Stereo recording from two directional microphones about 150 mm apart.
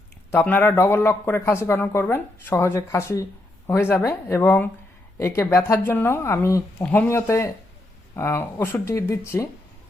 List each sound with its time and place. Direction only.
0.3 s speech: 10° left (ahead or behind)